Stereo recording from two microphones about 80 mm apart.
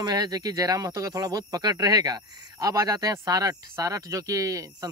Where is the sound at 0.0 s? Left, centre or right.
Right.